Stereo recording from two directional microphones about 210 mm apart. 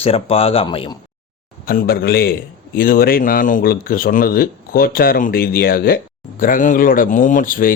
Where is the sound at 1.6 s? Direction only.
45° left (ahead or behind).